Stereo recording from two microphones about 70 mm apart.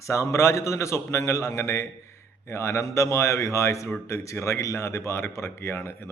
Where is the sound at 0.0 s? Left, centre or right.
Left.